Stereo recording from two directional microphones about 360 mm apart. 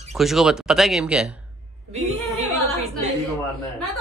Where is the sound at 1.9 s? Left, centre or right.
Centre.